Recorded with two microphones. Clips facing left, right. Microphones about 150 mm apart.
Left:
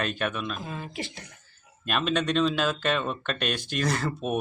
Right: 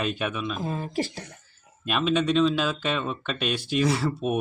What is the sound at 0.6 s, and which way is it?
Speech, 40° right (ahead or behind).